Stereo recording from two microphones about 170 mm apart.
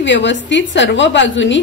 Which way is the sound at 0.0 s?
90° left.